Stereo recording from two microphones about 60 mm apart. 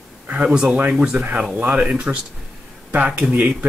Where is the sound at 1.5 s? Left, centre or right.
Right.